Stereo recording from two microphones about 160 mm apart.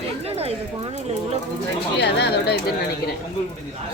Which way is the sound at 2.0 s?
90° left.